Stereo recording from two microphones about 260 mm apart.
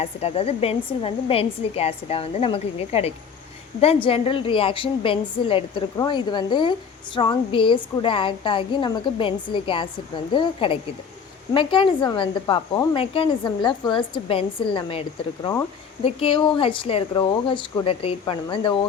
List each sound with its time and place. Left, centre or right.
0.0 s a woman's voice: left
16.0 s speech: centre